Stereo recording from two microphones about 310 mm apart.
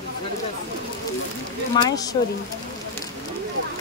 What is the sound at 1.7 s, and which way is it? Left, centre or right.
Speech, centre.